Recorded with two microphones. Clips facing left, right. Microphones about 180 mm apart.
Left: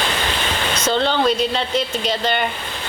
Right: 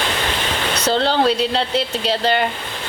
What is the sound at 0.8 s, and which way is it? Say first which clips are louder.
A woman's voice: right 1 dB; 35° right (ahead or behind).